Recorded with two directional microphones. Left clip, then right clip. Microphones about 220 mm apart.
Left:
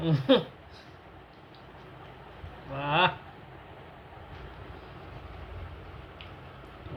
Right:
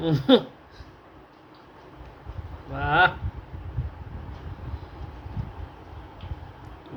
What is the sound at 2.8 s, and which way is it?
Speech, 55° right (ahead or behind).